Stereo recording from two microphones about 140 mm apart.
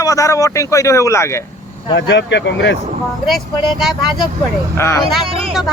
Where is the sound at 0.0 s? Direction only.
25° left (ahead or behind).